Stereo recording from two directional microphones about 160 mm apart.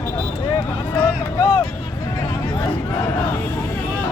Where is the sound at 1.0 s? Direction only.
20° left (ahead or behind).